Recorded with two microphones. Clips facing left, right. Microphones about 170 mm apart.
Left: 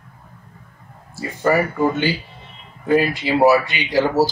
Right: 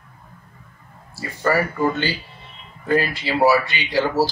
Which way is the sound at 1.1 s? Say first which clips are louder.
Left 3 dB; 15° left (ahead or behind).